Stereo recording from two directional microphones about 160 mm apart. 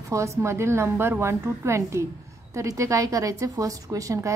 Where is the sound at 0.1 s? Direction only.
20° right (ahead or behind).